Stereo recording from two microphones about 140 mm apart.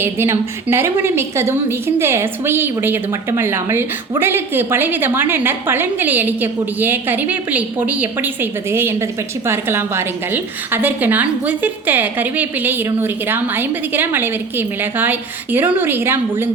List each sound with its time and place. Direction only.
0.0 s a woman's voice: 20° right (ahead or behind)